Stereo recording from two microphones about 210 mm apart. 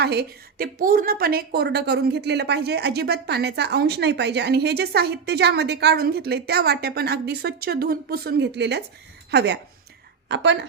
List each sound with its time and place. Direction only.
0.0 s a woman's voice: 50° right (ahead or behind)